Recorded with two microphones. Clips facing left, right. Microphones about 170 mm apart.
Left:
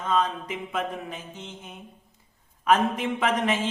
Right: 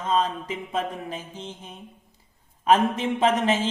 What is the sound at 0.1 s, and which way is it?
A man's voice, 30° right (ahead or behind).